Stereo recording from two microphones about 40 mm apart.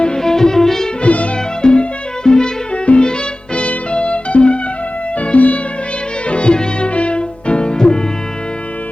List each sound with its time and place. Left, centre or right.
0.2 s music: centre
1.0 s music: left
1.6 s music: left